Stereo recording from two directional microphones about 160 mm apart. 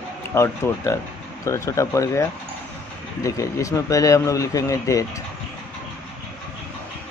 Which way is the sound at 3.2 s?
20° left (ahead or behind).